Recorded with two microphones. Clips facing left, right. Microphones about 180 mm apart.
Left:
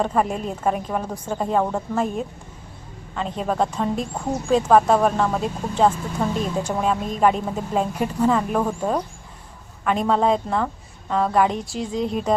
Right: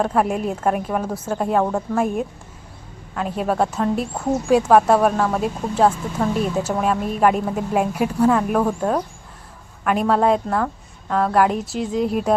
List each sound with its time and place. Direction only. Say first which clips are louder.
0.0 s speech: right 2 dB; 5° right (ahead or behind)